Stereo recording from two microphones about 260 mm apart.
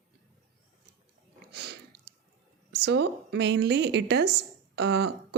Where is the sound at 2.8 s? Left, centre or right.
Right.